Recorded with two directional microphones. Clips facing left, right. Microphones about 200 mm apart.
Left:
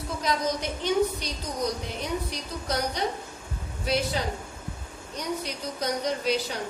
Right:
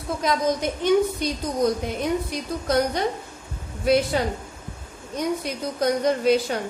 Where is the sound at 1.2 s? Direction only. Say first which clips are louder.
Right 8 dB; 50° right (ahead or behind).